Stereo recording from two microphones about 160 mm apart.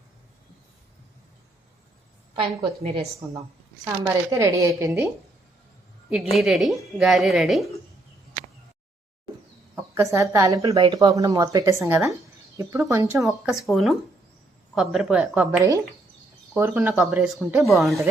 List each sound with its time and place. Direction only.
2.3 s a woman's voice: 35° right (ahead or behind)
4.0 s a woman's voice: 20° right (ahead or behind)
6.3 s speech: centre (ahead or behind)
9.7 s speech: 15° right (ahead or behind)
13.1 s a woman's voice: centre (ahead or behind)
16.9 s speech: centre (ahead or behind)